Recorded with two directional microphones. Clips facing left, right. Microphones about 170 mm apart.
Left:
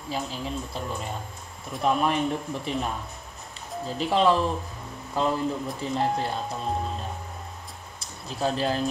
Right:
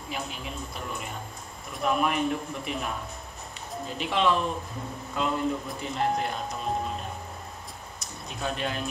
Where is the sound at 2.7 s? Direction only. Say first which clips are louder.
Left 4 dB; 30° left (ahead or behind).